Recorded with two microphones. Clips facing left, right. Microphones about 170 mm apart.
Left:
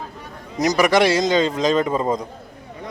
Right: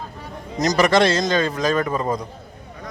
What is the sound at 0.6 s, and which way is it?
A man's voice, 10° left (ahead or behind).